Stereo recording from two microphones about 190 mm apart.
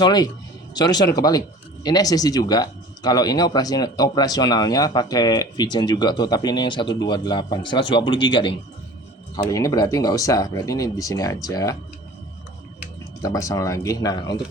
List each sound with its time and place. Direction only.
0.0 s speech: 20° left (ahead or behind)
13.2 s speech: 15° left (ahead or behind)